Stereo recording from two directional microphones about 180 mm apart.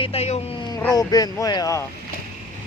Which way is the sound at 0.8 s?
20° left (ahead or behind).